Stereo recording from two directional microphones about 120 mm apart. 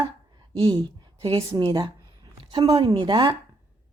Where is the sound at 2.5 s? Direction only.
30° right (ahead or behind).